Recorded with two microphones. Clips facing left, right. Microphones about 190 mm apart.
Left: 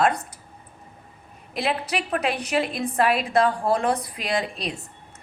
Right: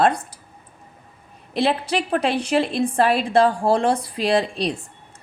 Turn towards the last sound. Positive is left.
turn(degrees=-30)  # may be behind; listen again after turning